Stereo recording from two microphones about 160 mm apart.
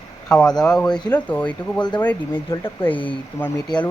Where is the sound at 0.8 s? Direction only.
25° left (ahead or behind).